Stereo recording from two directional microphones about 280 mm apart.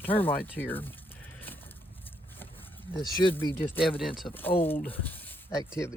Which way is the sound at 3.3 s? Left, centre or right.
Centre.